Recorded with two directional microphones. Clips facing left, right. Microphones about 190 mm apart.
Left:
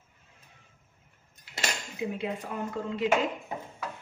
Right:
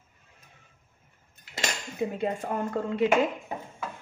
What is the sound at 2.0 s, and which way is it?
A woman's voice, 50° right (ahead or behind).